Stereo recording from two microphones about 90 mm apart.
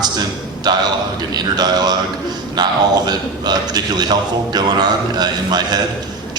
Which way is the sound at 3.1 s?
50° right (ahead or behind).